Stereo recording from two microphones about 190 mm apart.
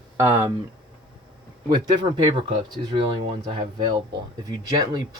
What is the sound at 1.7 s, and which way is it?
Speech, 20° right (ahead or behind).